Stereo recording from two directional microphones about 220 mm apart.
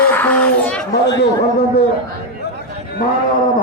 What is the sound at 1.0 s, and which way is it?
Speech, 50° left (ahead or behind).